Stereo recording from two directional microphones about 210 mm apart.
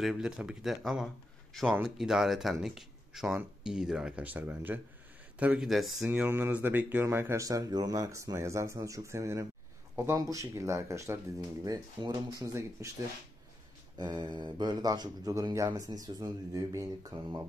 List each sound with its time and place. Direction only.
0.0 s speech: centre (ahead or behind)
13.9 s speech: 20° right (ahead or behind)